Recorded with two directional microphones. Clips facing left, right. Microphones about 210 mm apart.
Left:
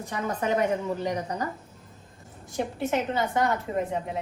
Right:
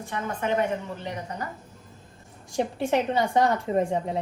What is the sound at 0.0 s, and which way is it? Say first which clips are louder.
Speech: left 1 dB; 40° left (ahead or behind).